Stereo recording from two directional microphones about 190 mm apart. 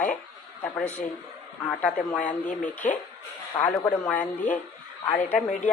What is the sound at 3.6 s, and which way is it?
Speech, 20° left (ahead or behind).